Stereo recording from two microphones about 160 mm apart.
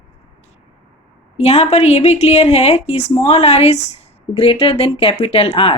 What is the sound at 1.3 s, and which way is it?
Speech, 40° left (ahead or behind).